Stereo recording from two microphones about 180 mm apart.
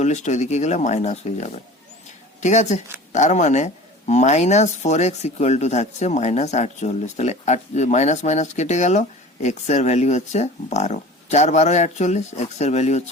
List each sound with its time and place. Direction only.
0.0 s speech: 40° left (ahead or behind)